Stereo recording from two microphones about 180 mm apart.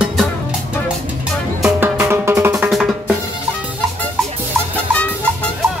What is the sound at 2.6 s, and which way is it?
Drum, centre (ahead or behind).